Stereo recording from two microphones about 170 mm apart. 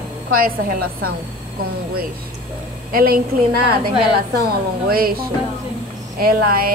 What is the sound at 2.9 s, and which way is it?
Speech, 60° right (ahead or behind).